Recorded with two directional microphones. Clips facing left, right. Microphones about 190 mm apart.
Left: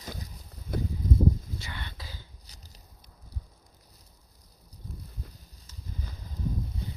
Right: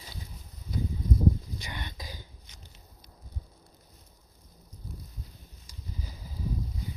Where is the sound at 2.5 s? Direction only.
35° left (ahead or behind).